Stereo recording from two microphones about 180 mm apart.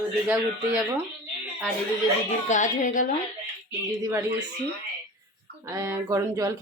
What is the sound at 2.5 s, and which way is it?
Speech, 45° left (ahead or behind).